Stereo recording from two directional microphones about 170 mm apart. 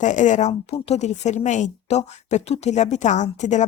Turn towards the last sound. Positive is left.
turn(degrees=45)  # may be behind; listen again after turning